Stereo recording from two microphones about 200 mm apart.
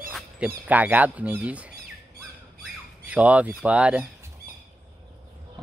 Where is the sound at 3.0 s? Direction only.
5° right (ahead or behind).